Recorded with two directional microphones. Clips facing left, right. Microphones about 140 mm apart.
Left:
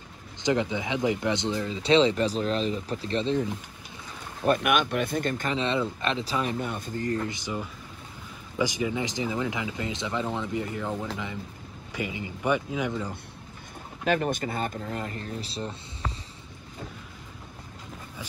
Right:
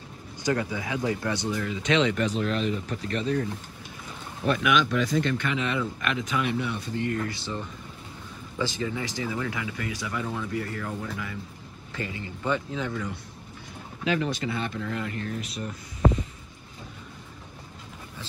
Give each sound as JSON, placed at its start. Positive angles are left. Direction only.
{"t": 0.4, "sound": "speech", "side_deg": 20}
{"t": 4.5, "sound": "speech", "side_deg": 50}
{"t": 5.3, "sound": "speech", "side_deg": 35}
{"t": 7.2, "sound": "speech", "side_deg": 20}
{"t": 14.0, "sound": "speech", "side_deg": 50}